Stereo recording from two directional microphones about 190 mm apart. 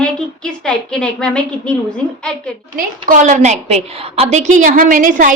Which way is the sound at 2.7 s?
45° right (ahead or behind).